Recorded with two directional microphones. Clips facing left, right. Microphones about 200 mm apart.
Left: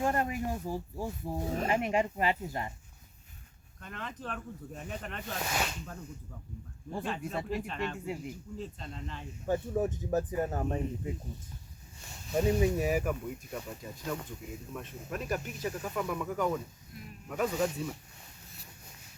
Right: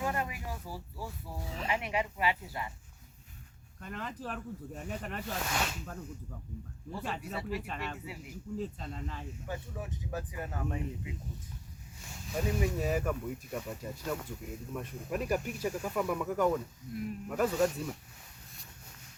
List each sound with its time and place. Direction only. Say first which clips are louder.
0.0 s speech: left 5 dB; 45° left (ahead or behind)
3.8 s speech: right 2 dB; 10° right (ahead or behind)
7.0 s speech: left 3 dB; 5° right (ahead or behind)
7.9 s speech: left 7 dB; 45° left (ahead or behind)
8.2 s speech: right 2 dB; 5° right (ahead or behind)
9.5 s speech: left 12 dB; 45° left (ahead or behind)
12.5 s speech: left 5 dB; 25° left (ahead or behind)
12.7 s speech: left 2 dB; 15° left (ahead or behind)
13.5 s speech: right 2 dB; centre (ahead or behind)